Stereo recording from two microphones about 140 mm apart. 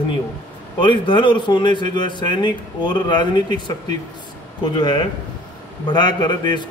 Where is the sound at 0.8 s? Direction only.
35° left (ahead or behind).